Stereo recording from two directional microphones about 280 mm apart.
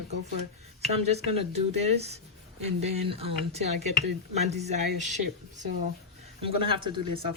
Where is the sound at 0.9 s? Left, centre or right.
Right.